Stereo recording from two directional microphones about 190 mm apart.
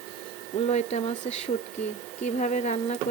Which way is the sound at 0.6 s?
35° left (ahead or behind).